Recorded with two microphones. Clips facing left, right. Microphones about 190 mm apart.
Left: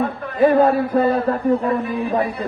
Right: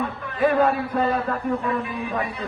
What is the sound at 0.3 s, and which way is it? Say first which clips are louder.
A man's voice: left 6 dB; 35° left (ahead or behind).